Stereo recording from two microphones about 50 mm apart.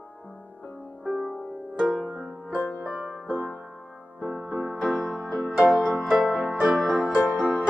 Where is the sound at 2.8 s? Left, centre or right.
Right.